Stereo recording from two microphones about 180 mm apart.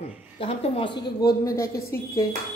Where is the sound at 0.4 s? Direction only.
35° left (ahead or behind).